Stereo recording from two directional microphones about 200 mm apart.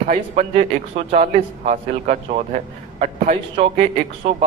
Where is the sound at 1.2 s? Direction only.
40° right (ahead or behind).